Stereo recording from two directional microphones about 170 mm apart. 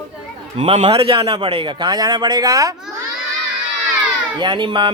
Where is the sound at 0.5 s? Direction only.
30° right (ahead or behind).